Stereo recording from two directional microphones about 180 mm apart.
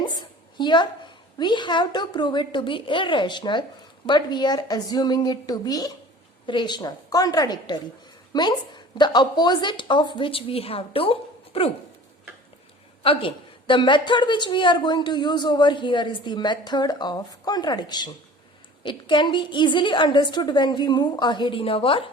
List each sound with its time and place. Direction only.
0.0 s a sound: 25° left (ahead or behind)
1.4 s a woman's voice: 25° left (ahead or behind)
13.0 s a woman's voice: 30° left (ahead or behind)